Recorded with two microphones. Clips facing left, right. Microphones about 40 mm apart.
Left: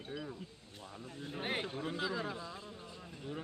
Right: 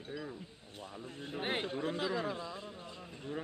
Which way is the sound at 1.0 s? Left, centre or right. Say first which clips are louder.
Left 2 dB; right.